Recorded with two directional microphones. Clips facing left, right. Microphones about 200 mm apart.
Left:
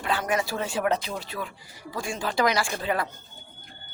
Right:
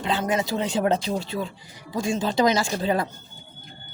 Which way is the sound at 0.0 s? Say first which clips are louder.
Right 2 dB; 20° right (ahead or behind).